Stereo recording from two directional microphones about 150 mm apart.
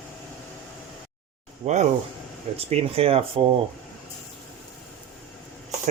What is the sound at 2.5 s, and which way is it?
Speech, 40° right (ahead or behind).